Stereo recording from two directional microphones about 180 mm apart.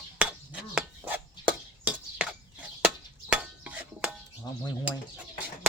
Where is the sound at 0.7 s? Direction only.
10° right (ahead or behind).